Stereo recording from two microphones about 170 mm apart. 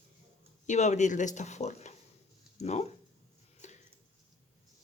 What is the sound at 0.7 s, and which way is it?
Speech, 45° left (ahead or behind).